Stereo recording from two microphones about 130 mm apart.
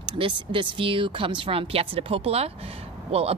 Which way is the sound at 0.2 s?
40° right (ahead or behind).